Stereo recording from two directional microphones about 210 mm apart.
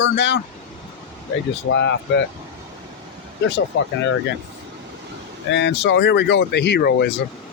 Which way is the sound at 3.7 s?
60° left (ahead or behind).